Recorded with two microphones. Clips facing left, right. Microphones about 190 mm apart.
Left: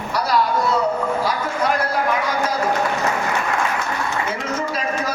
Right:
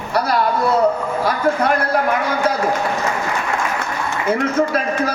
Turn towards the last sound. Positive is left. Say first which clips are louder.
# right 4 dB
turn(degrees=-55)  # may be behind; listen again after turning